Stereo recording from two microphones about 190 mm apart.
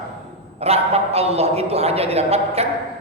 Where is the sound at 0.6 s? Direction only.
30° right (ahead or behind).